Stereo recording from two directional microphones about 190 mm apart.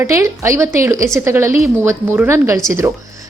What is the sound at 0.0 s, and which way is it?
A woman's voice, 15° right (ahead or behind).